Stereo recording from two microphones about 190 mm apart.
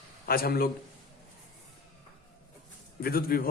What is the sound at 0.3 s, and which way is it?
Speech, 50° left (ahead or behind).